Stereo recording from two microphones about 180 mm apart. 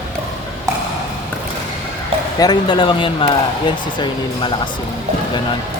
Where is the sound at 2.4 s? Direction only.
25° left (ahead or behind).